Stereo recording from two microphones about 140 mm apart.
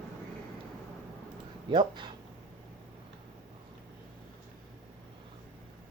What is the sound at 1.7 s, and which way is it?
Speech, 35° right (ahead or behind).